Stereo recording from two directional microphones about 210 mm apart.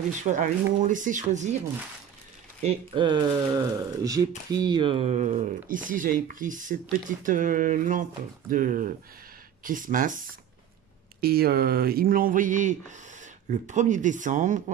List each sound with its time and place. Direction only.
0.2 s speech: 35° right (ahead or behind)
2.6 s speech: 25° right (ahead or behind)